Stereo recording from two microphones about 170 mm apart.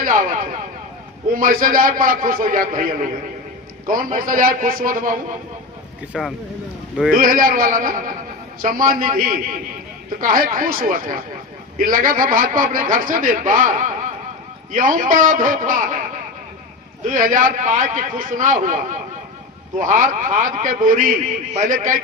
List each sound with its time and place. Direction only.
1.3 s a man's voice: 55° right (ahead or behind)
6.1 s speech: centre (ahead or behind)
7.2 s a man's voice: 55° right (ahead or behind)
17.1 s a man's voice: 50° right (ahead or behind)
19.8 s a man's voice: 50° right (ahead or behind)